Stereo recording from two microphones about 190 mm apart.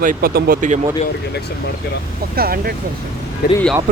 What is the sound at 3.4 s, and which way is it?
Speech, 50° left (ahead or behind).